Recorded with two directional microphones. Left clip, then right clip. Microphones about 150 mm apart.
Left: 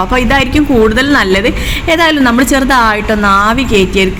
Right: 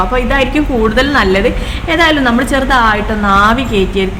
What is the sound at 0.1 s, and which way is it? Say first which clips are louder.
A woman's voice: left 2 dB; 35° left (ahead or behind).